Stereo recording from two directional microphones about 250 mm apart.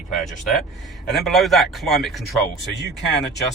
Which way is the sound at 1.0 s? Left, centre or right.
Centre.